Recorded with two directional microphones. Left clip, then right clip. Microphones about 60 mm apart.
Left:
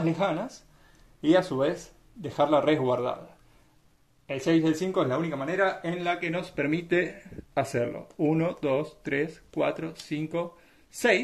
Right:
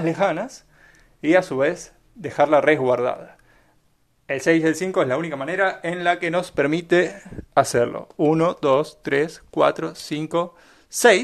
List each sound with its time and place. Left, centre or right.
0.1 s speech: centre
5.2 s speech: right
5.9 s speech: centre
8.5 s speech: centre